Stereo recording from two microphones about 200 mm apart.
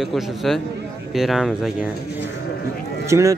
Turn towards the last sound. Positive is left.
turn(degrees=-15)  # may be behind; listen again after turning